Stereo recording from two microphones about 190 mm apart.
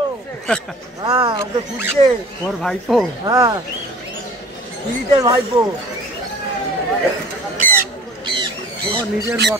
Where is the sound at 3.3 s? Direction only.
20° right (ahead or behind).